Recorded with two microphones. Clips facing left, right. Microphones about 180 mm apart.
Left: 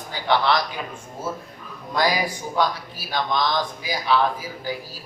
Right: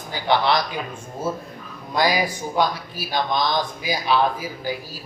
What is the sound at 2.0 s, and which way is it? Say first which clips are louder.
A man's voice: right 2 dB; 10° right (ahead or behind).